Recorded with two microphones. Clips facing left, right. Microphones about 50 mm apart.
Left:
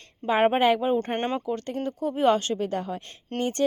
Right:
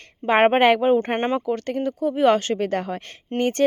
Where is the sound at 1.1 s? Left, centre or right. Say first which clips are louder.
Right 5 dB; centre.